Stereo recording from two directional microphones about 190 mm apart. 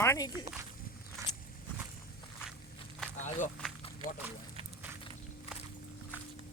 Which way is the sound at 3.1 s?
40° left (ahead or behind).